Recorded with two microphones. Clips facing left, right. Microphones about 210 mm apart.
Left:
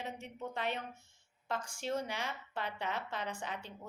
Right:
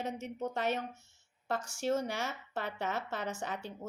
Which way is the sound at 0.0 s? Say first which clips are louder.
Right 6 dB; 45° right (ahead or behind).